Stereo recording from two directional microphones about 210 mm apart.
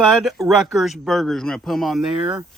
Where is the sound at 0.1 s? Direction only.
Centre (ahead or behind).